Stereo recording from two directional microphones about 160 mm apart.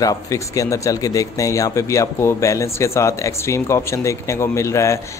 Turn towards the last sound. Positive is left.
turn(degrees=20)  # may be behind; listen again after turning